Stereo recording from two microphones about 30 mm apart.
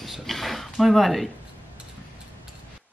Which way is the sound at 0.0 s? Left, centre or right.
Centre.